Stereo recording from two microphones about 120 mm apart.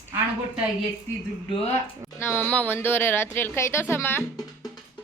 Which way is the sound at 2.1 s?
20° left (ahead or behind).